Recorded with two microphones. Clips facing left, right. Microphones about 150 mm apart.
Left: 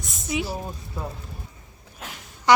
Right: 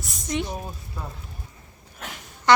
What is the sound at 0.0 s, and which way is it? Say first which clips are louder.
Speech: even; centre (ahead or behind).